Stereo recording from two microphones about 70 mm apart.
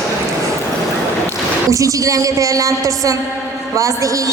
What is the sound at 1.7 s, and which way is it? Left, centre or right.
A woman's voice, right.